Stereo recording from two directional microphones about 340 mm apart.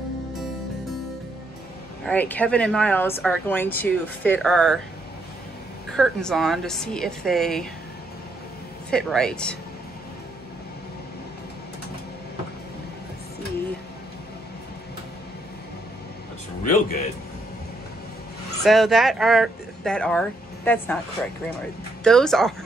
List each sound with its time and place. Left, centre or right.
2.0 s speech: centre
5.9 s speech: centre
8.9 s speech: centre
16.6 s speech: left
18.6 s speech: centre
22.0 s speech: centre